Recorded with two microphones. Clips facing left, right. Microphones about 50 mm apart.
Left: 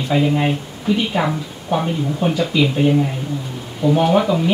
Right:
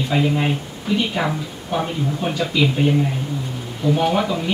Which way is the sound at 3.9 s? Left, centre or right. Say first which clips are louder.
Left 4 dB; centre.